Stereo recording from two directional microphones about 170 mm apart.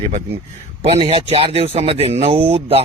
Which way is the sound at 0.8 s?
35° right (ahead or behind).